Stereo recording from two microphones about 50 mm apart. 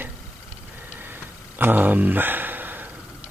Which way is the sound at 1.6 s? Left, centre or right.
Right.